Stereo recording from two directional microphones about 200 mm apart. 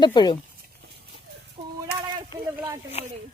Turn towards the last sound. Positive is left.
turn(degrees=30)  # may be behind; listen again after turning